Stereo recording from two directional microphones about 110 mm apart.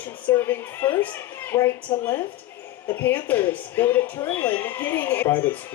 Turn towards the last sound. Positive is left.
turn(degrees=20)  # may be behind; listen again after turning